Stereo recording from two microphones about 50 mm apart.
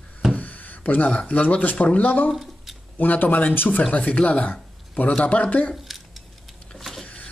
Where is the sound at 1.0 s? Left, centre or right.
Left.